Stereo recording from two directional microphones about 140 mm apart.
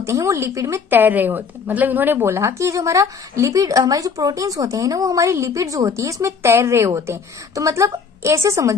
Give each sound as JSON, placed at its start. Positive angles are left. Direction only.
{"t": 0.0, "sound": "speech", "side_deg": -20}